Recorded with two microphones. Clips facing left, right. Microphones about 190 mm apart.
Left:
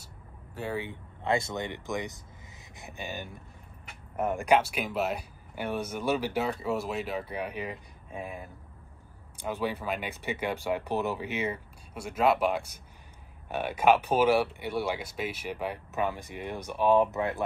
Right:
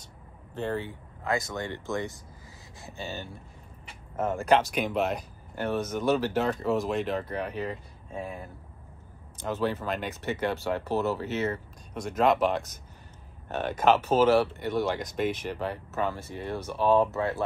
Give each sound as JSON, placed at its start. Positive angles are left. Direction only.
{"t": 0.6, "sound": "speech", "side_deg": 10}
{"t": 1.2, "sound": "speech", "side_deg": 25}